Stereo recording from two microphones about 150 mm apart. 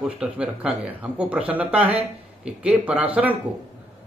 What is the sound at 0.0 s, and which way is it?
Speech, 5° right (ahead or behind).